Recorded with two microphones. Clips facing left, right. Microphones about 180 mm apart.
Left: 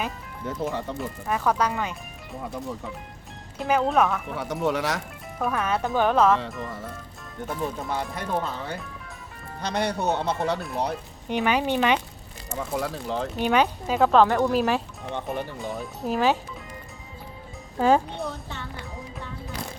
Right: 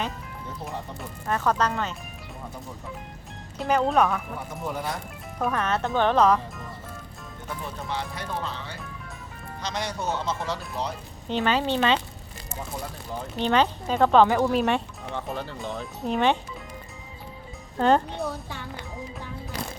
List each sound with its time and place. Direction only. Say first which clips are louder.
0.6 s speech: left 8 dB; 90° left
0.9 s speech: left 1 dB; 10° left (ahead or behind)
3.6 s speech: even; centre (ahead or behind)
4.4 s speech: left 7 dB; 80° left
5.4 s speech: even; 5° left (ahead or behind)
7.4 s speech: left 5 dB; 50° left (ahead or behind)
11.3 s speech: left 1 dB; 15° left (ahead or behind)
12.5 s speech: left 7 dB; 90° left
13.4 s speech: even; 10° left (ahead or behind)
17.7 s speech: left 1 dB; 5° left (ahead or behind)